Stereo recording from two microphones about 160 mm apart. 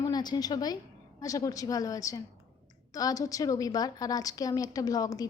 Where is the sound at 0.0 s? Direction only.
25° left (ahead or behind).